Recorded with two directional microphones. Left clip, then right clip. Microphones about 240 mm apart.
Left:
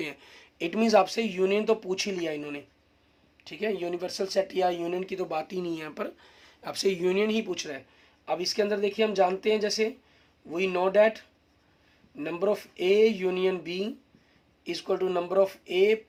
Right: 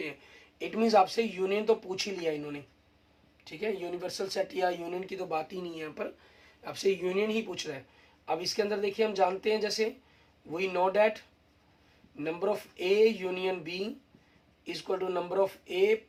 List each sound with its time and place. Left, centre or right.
0.6 s speech: left
12.2 s speech: left